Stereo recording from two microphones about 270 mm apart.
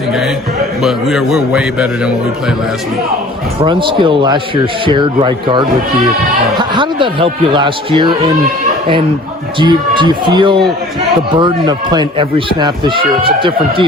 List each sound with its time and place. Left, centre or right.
0.8 s a man's voice: centre
3.6 s a man's voice: centre
9.6 s a man's voice: centre